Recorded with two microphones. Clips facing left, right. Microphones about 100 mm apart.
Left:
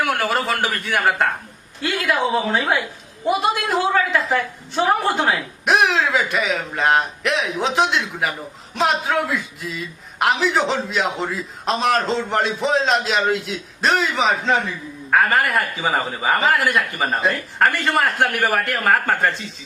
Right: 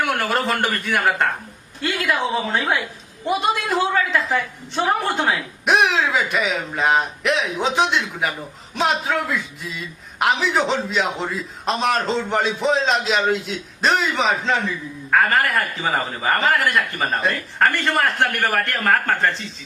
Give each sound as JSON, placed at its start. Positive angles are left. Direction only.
{"t": 0.0, "sound": "a woman's voice", "side_deg": 0}